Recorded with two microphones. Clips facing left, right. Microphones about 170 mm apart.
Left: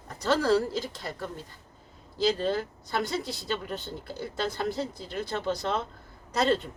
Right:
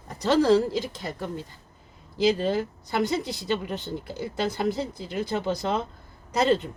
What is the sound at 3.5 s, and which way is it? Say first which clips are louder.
Speech: right 5 dB; 20° right (ahead or behind).